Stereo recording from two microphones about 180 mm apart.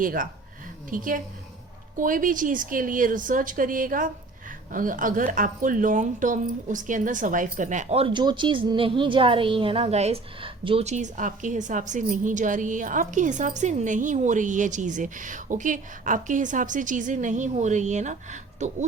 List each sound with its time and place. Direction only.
0.0 s speech: 50° right (ahead or behind)